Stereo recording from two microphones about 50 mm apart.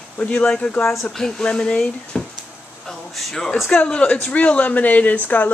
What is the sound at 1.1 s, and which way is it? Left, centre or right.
Speech, centre.